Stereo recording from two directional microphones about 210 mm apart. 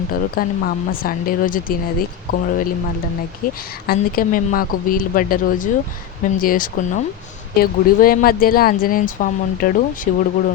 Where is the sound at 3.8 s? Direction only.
45° left (ahead or behind).